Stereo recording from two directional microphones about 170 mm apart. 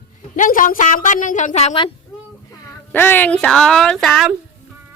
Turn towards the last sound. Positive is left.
turn(degrees=0)  # may be behind; listen again after turning